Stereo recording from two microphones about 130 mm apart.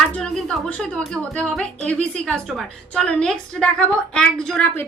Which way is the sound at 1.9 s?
10° left (ahead or behind).